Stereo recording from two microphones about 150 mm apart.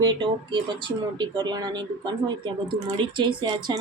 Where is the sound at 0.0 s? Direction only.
30° right (ahead or behind).